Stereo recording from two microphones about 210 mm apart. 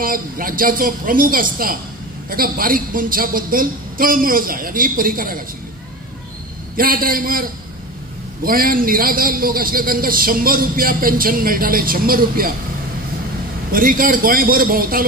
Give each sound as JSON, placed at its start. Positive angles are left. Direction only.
{"t": 0.0, "sound": "a man's voice", "side_deg": -40}
{"t": 6.8, "sound": "a man's voice", "side_deg": -45}
{"t": 13.7, "sound": "a man's voice", "side_deg": -40}